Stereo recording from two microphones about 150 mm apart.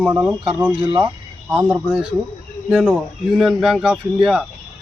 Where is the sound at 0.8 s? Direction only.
35° right (ahead or behind).